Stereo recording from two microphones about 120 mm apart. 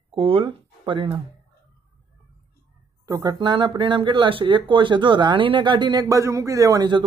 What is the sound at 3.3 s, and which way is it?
Speech, 40° right (ahead or behind).